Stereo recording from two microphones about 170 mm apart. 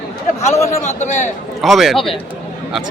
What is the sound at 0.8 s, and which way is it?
Speech, 45° left (ahead or behind).